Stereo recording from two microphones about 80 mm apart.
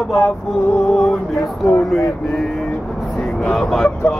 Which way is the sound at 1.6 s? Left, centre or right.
Centre.